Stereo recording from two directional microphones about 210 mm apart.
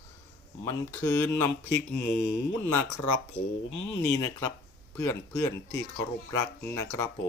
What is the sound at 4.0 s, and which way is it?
Speech, 10° left (ahead or behind).